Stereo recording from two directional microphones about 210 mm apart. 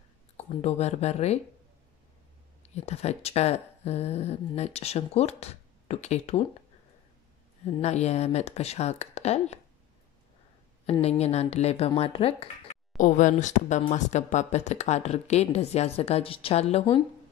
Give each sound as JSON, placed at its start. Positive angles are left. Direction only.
{"t": 0.6, "sound": "speech", "side_deg": 30}
{"t": 2.7, "sound": "speech", "side_deg": 30}
{"t": 7.6, "sound": "speech", "side_deg": 30}
{"t": 10.9, "sound": "speech", "side_deg": 30}
{"t": 12.9, "sound": "speech", "side_deg": 35}